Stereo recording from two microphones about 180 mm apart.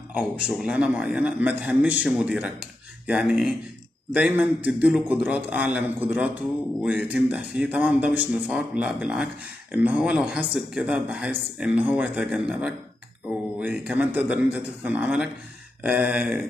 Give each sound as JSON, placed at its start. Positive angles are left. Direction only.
{"t": 0.1, "sound": "a man's voice", "side_deg": -5}